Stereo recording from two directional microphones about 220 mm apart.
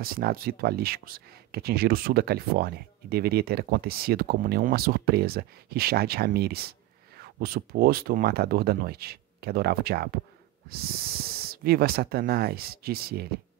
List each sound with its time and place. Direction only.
0.0 s speech: 45° right (ahead or behind)